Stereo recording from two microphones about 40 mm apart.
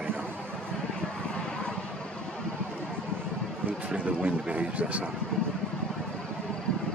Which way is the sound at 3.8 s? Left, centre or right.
Right.